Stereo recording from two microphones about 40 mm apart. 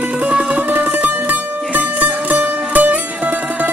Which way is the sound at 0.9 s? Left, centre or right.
Right.